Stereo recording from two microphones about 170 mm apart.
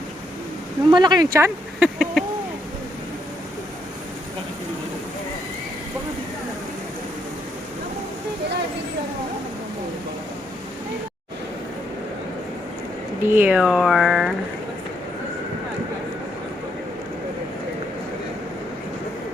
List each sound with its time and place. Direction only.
0.9 s speech: 25° right (ahead or behind)
1.8 s bird: 5° right (ahead or behind)
13.2 s speech: 10° right (ahead or behind)